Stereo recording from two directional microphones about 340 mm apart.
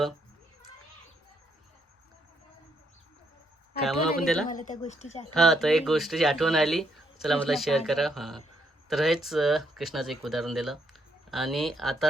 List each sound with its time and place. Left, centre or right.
4.2 s speech: centre
4.4 s speech: left
5.3 s speech: centre